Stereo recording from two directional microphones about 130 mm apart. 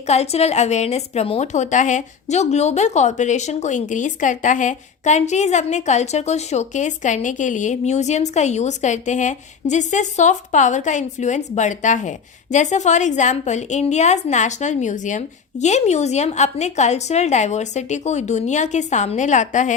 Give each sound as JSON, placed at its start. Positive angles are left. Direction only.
{"t": 0.1, "sound": "a woman's voice", "side_deg": 55}